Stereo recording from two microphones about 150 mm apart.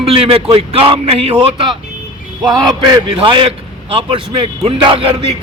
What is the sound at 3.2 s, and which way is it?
A man's voice, 35° right (ahead or behind).